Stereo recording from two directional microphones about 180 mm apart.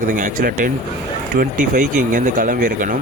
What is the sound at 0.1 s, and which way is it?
Speech, 45° right (ahead or behind).